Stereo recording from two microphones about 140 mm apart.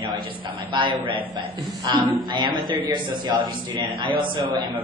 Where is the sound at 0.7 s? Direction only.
35° right (ahead or behind).